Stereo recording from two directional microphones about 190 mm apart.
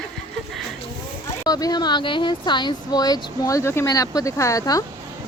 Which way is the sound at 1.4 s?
20° left (ahead or behind).